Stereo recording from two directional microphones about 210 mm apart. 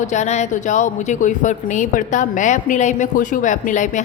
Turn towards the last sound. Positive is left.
turn(degrees=35)  # may be behind; listen again after turning